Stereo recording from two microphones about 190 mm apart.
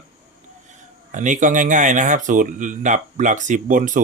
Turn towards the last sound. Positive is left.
turn(degrees=-45)  # may be behind; listen again after turning